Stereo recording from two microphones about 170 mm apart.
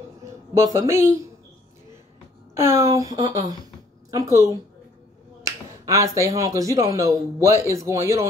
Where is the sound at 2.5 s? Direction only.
15° right (ahead or behind).